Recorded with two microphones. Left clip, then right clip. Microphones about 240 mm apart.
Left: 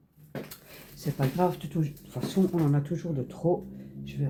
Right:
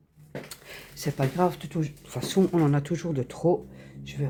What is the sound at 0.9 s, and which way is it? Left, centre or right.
Speech, right.